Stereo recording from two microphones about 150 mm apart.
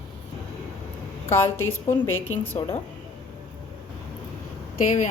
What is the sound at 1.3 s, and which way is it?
Speech, 15° left (ahead or behind).